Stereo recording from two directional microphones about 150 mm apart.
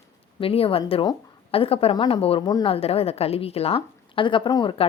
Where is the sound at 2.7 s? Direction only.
40° left (ahead or behind).